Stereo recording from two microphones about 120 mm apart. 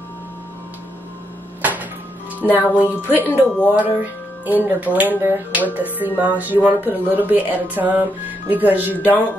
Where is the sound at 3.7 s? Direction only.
15° right (ahead or behind).